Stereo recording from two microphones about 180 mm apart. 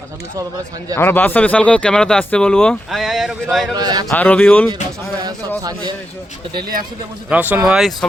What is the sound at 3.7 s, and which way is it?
Speech, 20° right (ahead or behind).